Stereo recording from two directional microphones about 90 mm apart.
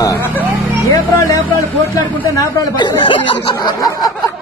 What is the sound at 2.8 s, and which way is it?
Speech, 55° left (ahead or behind).